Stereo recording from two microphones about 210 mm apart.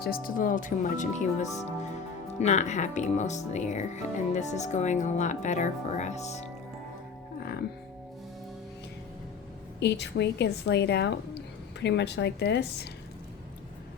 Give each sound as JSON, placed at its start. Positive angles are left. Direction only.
{"t": 0.0, "sound": "speech", "side_deg": 45}
{"t": 9.8, "sound": "a woman's voice", "side_deg": 55}